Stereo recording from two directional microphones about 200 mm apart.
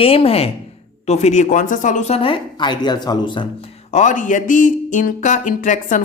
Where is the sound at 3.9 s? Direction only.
40° left (ahead or behind).